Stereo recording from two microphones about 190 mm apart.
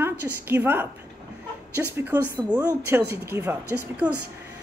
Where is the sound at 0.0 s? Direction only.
10° right (ahead or behind).